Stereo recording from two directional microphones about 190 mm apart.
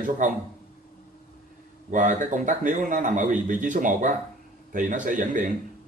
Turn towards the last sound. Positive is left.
turn(degrees=-45)  # may be behind; listen again after turning